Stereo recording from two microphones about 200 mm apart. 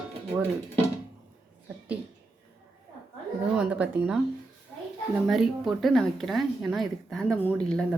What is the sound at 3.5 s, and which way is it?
Speech, 5° right (ahead or behind).